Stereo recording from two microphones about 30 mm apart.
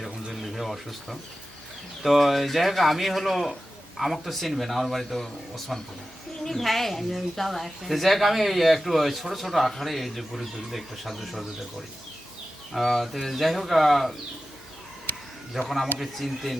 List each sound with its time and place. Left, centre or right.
0.4 s a sound: centre
2.0 s speech: centre
12.8 s speech: centre
13.2 s speech: centre
15.6 s speech: centre